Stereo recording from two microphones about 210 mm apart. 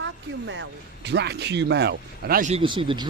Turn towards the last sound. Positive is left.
turn(degrees=-20)  # may be behind; listen again after turning